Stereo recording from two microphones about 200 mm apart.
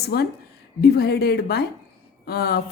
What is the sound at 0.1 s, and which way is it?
Speech, 55° left (ahead or behind).